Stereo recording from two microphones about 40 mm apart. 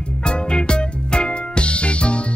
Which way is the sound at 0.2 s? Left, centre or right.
Left.